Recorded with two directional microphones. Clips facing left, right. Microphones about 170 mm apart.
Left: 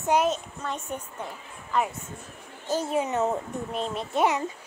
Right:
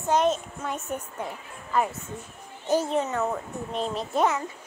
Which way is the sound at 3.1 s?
25° left (ahead or behind).